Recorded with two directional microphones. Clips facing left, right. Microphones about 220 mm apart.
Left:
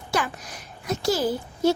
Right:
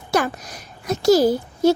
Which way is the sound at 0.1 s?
40° right (ahead or behind).